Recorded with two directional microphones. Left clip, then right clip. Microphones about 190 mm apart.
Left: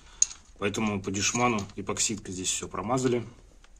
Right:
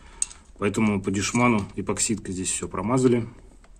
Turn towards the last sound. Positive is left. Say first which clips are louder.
# right 5 dB
turn(degrees=-35)  # may be behind; listen again after turning